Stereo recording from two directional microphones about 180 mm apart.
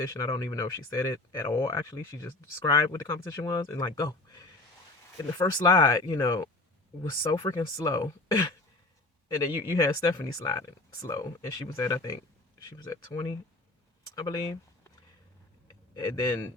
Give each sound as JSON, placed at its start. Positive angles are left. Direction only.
{"t": 0.1, "sound": "speech", "side_deg": 20}
{"t": 16.0, "sound": "speech", "side_deg": 20}